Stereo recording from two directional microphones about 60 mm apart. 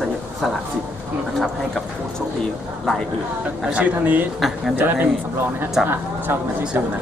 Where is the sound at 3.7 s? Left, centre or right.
Right.